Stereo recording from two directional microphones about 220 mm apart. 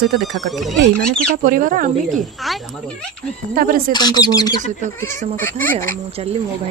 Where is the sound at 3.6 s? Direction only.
40° right (ahead or behind).